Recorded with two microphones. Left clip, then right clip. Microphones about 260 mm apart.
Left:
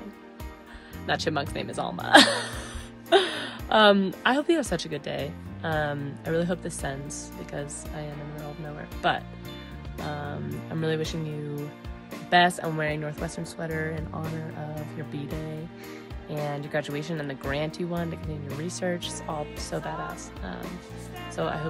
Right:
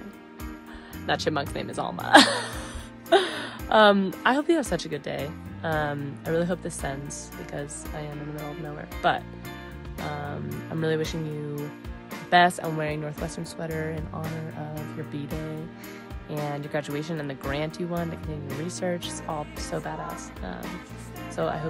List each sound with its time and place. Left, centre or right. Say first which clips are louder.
1.0 s speech: right 1 dB; centre